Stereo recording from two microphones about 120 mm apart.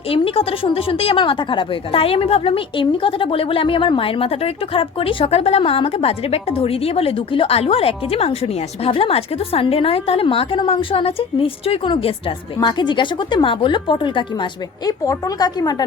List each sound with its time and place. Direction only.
0.1 s a woman's voice: 50° left (ahead or behind)
12.5 s a woman's voice: 40° left (ahead or behind)
14.8 s a woman's voice: 30° left (ahead or behind)